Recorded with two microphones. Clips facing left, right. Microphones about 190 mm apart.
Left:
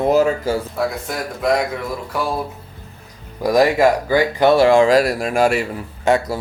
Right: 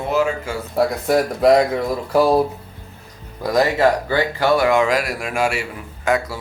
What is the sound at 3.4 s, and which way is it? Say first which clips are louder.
Speech: left 3 dB; 15° left (ahead or behind).